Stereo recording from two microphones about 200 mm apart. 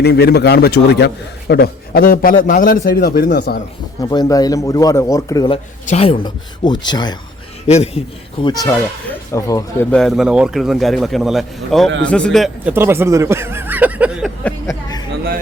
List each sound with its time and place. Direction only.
0.0 s a man's voice: 55° left (ahead or behind)
4.1 s a man's voice: 20° left (ahead or behind)
5.8 s speech: 35° left (ahead or behind)
7.7 s a man's voice: 30° left (ahead or behind); by 9.6 s 15° left (ahead or behind)
9.9 s a man's voice: centre (ahead or behind)
12.7 s speech: 10° right (ahead or behind)
14.4 s speech: 15° left (ahead or behind)